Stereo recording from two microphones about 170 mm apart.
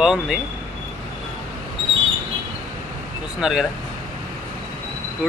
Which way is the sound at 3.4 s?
5° right (ahead or behind).